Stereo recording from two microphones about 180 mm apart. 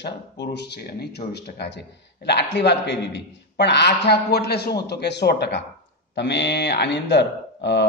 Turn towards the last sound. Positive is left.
turn(degrees=75)  # may be behind; listen again after turning